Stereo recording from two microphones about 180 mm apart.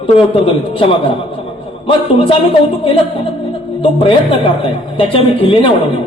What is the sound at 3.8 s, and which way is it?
A woman's voice, 30° left (ahead or behind).